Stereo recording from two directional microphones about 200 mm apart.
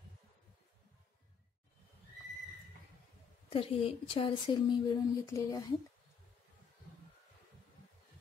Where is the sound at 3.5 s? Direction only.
25° left (ahead or behind).